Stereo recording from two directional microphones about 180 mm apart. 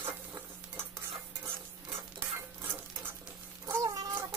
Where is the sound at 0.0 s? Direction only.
15° right (ahead or behind).